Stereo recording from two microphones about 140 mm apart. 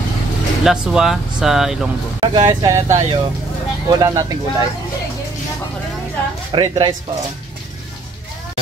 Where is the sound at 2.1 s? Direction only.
35° right (ahead or behind).